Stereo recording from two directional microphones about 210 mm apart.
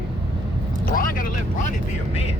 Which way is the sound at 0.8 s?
40° left (ahead or behind).